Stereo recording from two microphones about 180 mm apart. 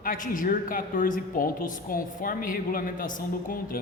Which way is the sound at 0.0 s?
50° left (ahead or behind).